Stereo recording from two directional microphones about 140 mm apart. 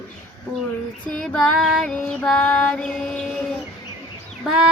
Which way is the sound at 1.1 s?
10° left (ahead or behind).